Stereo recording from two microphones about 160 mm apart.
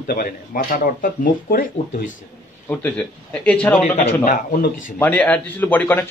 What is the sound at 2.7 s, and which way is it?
Speech, 10° left (ahead or behind).